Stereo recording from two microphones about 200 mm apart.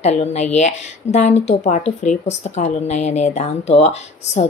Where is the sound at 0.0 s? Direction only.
35° left (ahead or behind).